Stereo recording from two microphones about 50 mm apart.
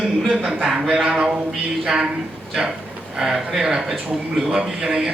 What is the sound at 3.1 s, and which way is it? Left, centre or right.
Speech, centre.